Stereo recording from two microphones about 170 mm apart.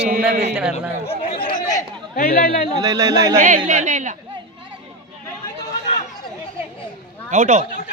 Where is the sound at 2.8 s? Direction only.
20° right (ahead or behind).